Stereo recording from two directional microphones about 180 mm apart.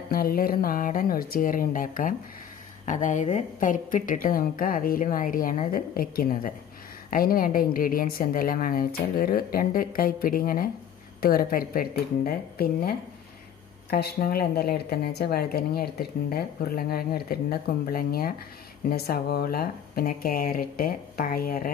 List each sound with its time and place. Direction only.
0.1 s a woman's voice: 55° left (ahead or behind)